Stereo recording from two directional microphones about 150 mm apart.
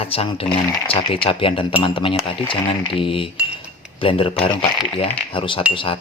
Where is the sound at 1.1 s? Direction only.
35° left (ahead or behind).